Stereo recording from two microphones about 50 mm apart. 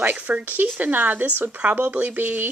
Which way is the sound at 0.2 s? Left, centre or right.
Right.